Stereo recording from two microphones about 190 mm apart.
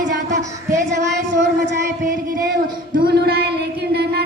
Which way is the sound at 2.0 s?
45° right (ahead or behind).